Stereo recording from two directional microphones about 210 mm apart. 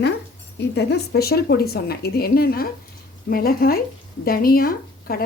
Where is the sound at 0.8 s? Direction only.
50° left (ahead or behind).